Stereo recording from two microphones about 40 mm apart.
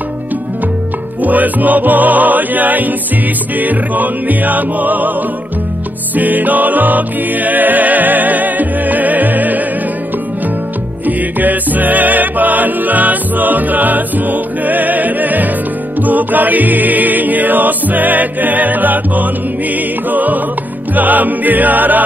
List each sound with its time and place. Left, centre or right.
1.2 s music: right
6.1 s music: right
11.1 s music: right